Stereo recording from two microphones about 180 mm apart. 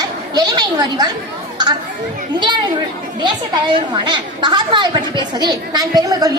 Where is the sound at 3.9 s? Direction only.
25° right (ahead or behind).